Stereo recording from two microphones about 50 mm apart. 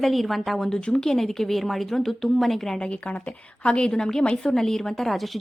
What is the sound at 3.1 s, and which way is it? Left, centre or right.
A woman's voice, left.